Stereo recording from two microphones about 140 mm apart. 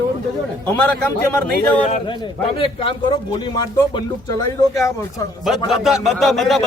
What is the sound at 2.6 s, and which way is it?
Speech, 40° left (ahead or behind).